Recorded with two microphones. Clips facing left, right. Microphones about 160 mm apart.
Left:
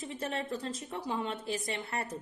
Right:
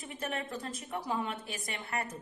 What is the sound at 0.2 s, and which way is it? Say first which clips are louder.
A woman's voice: left 1 dB; 30° left (ahead or behind).